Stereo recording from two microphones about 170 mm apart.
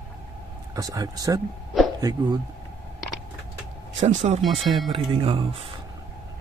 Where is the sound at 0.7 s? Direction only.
20° right (ahead or behind).